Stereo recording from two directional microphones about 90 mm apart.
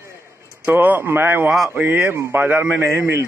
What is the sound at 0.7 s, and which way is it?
Speech, 20° right (ahead or behind).